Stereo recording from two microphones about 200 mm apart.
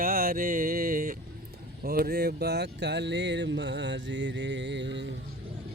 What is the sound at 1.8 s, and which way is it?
Speech, 50° right (ahead or behind).